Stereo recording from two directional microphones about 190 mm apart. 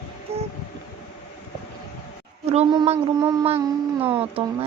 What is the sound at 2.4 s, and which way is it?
Speech, 35° right (ahead or behind).